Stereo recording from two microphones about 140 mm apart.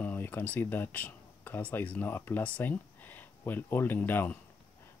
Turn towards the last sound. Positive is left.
turn(degrees=15)  # may be behind; listen again after turning